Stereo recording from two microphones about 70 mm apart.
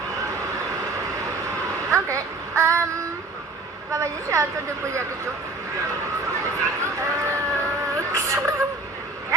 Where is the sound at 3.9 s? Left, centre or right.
Right.